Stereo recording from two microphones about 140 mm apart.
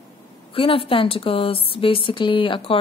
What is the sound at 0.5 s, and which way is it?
A woman's voice, 40° left (ahead or behind).